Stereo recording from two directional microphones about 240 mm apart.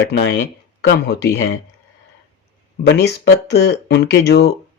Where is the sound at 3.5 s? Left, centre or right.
Left.